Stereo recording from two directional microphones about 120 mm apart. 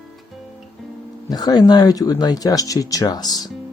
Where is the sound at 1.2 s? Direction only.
35° left (ahead or behind).